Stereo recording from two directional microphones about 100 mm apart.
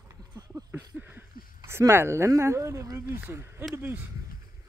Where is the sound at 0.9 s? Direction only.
20° right (ahead or behind).